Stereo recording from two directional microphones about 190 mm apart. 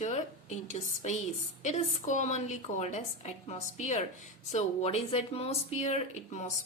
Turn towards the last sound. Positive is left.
turn(degrees=35)  # may be behind; listen again after turning